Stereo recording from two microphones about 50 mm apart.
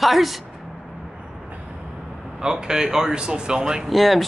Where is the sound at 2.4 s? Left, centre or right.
Centre.